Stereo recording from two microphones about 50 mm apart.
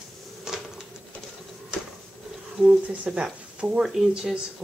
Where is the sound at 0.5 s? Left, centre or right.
Centre.